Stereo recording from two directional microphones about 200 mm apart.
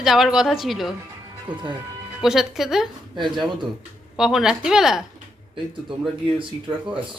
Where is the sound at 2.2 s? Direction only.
Centre (ahead or behind).